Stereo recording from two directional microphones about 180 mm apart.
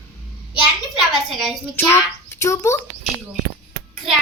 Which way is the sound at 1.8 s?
10° left (ahead or behind).